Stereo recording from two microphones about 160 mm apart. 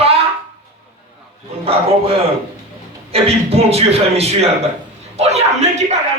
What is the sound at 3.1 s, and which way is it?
A man's voice, 40° right (ahead or behind).